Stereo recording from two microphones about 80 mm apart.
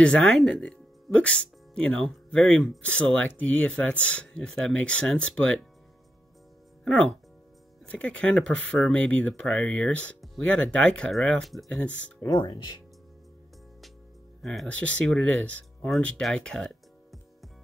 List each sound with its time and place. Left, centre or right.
0.0 s speech: centre
6.8 s speech: centre
12.2 s speech: left
14.4 s speech: centre
14.7 s speech: centre
16.2 s music: centre